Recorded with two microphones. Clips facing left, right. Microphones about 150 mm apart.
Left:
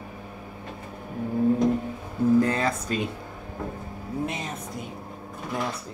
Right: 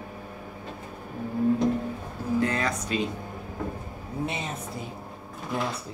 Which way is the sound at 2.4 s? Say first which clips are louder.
Left 2 dB; 30° left (ahead or behind).